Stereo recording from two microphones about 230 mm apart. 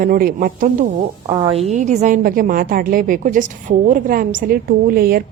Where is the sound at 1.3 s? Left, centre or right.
Right.